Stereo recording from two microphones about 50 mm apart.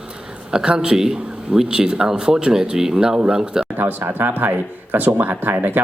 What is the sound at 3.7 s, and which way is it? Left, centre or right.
Speech, right.